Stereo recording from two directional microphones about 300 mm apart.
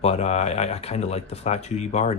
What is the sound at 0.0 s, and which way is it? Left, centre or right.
Speech, left.